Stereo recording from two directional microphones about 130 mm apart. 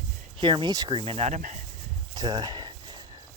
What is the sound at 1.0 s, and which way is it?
Speech, 50° right (ahead or behind).